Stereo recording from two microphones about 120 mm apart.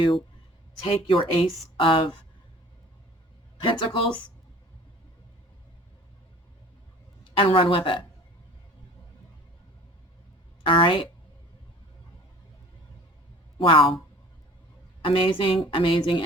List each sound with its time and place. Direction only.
0.9 s a man's voice: 45° left (ahead or behind)
3.6 s a man's voice: 45° left (ahead or behind)
7.3 s a man's voice: 50° left (ahead or behind)
10.6 s a woman's voice: 45° left (ahead or behind)
13.6 s a man's voice: 45° left (ahead or behind)
15.0 s a man's voice: 45° left (ahead or behind)